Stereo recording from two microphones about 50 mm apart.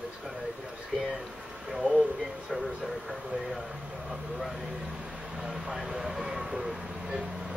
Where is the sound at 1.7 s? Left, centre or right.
Centre.